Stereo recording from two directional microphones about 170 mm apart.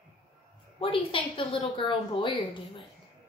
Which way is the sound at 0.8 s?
30° left (ahead or behind).